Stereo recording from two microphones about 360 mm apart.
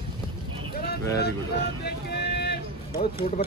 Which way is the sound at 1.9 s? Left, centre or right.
Left.